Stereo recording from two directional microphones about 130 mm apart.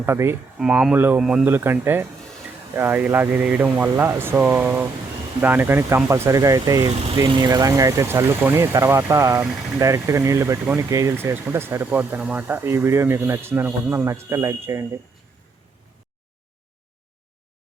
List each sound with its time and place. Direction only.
0.0 s speech: 20° right (ahead or behind)
0.6 s speech: 5° right (ahead or behind)
1.2 s speech: 5° right (ahead or behind)
1.5 s speech: 15° right (ahead or behind)